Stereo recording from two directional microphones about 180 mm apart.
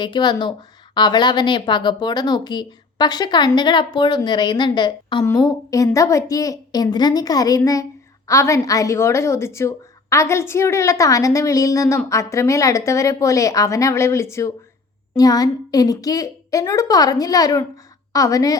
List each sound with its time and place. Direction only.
0.0 s a woman's voice: 25° left (ahead or behind)